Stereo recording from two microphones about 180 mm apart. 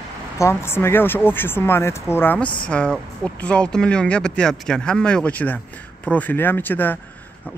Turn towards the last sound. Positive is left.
turn(degrees=10)  # may be behind; listen again after turning